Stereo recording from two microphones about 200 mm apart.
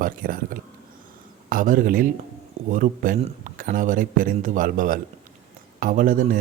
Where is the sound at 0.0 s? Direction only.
45° right (ahead or behind).